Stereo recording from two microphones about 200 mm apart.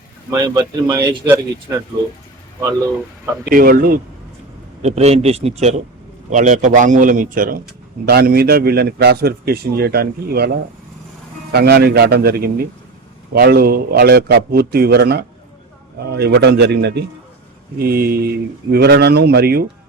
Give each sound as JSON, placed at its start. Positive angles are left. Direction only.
{"t": 0.3, "sound": "speech", "side_deg": -20}
{"t": 3.4, "sound": "a man's voice", "side_deg": -45}
{"t": 4.8, "sound": "a man's voice", "side_deg": -35}